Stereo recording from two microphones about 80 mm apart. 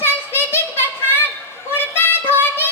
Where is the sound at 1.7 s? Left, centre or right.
Left.